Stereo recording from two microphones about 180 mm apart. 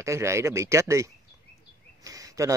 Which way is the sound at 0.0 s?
15° right (ahead or behind).